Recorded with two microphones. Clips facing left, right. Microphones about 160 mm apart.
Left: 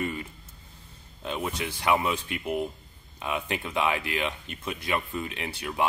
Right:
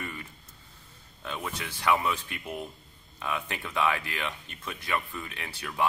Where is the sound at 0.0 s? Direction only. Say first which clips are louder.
Left 8 dB; 20° left (ahead or behind).